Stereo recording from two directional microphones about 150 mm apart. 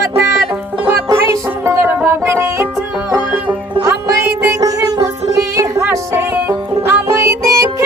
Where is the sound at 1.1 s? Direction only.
15° right (ahead or behind).